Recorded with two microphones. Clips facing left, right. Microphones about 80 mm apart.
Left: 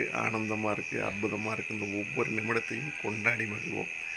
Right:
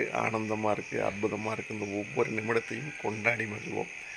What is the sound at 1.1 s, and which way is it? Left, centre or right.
Speech, centre.